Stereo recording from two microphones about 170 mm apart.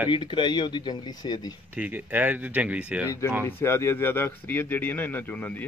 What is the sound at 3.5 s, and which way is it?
Speech, 15° left (ahead or behind).